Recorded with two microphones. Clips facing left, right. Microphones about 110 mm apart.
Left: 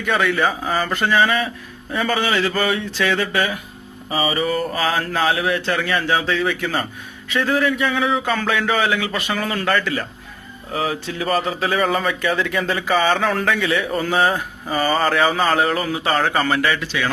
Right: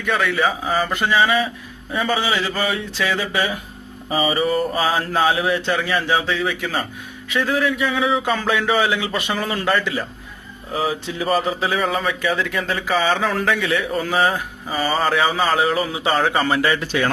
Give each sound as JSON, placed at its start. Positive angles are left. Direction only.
{"t": 0.0, "sound": "speech", "side_deg": 0}
{"t": 8.6, "sound": "a man's voice", "side_deg": -15}
{"t": 11.3, "sound": "speech", "side_deg": -5}
{"t": 16.6, "sound": "a man's voice", "side_deg": -25}
{"t": 16.8, "sound": "a man's voice", "side_deg": -45}